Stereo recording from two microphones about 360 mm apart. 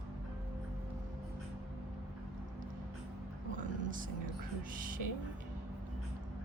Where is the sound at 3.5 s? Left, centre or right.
Right.